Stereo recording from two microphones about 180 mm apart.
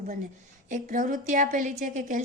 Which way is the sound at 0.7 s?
50° right (ahead or behind).